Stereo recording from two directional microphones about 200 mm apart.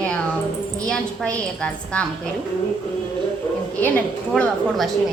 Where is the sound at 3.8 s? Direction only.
5° left (ahead or behind).